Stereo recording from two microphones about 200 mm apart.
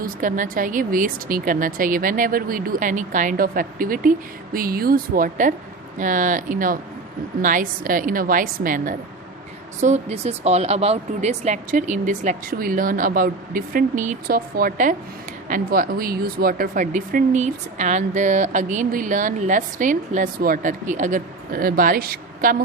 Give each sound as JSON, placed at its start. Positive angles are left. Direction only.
{"t": 0.0, "sound": "a woman's voice", "side_deg": -40}